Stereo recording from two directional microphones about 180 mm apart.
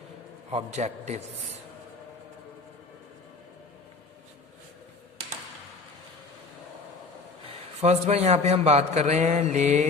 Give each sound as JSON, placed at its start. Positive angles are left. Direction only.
{"t": 0.5, "sound": "a man's voice", "side_deg": -40}
{"t": 7.8, "sound": "a man's voice", "side_deg": -35}